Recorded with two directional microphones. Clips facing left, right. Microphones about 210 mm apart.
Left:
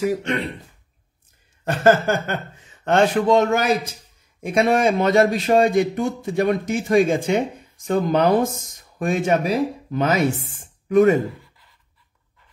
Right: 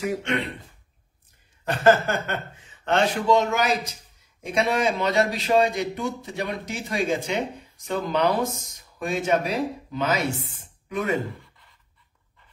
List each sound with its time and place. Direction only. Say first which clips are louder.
1.6 s a man's voice: left 2 dB; 45° left (ahead or behind)